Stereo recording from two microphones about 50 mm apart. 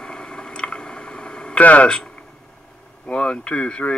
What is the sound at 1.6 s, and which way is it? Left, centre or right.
Speech, left.